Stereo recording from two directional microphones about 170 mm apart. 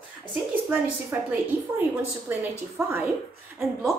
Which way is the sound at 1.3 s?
10° right (ahead or behind).